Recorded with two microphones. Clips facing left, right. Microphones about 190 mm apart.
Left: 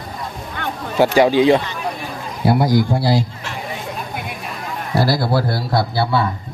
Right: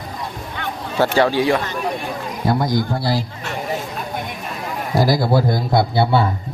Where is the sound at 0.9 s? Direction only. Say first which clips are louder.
Left 3 dB; 15° left (ahead or behind).